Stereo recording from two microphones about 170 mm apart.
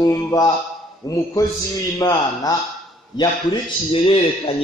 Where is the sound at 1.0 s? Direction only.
20° left (ahead or behind).